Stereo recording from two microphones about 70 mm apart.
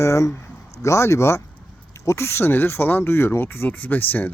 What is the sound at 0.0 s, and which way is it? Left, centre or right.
Speech, left.